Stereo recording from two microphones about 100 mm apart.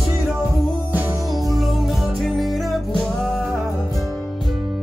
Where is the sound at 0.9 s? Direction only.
20° right (ahead or behind).